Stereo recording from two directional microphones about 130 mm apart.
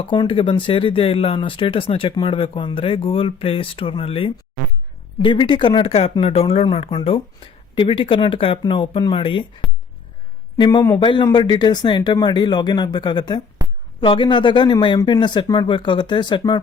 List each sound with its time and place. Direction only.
0.0 s speech: 40° left (ahead or behind)
10.6 s speech: 30° left (ahead or behind)